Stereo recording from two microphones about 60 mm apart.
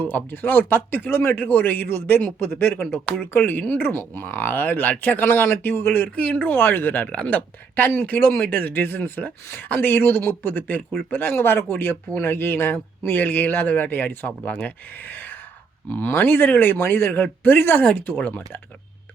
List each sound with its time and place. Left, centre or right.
0.0 s a man's voice: left
6.1 s speech: left
6.6 s a man's voice: left
8.7 s a man's voice: left